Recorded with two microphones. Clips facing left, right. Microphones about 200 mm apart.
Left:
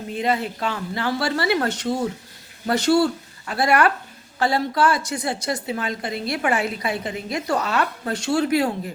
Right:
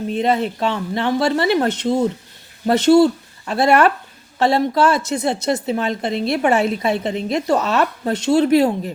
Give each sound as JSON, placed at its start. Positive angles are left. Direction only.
{"t": 0.1, "sound": "a woman's voice", "side_deg": -25}